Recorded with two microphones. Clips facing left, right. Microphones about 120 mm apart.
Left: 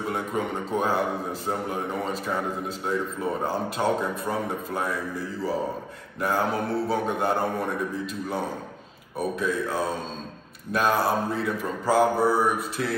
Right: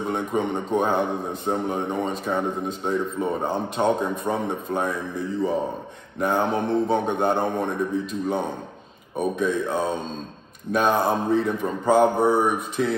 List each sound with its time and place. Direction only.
0.0 s speech: 5° left (ahead or behind)
6.1 s speech: 5° left (ahead or behind)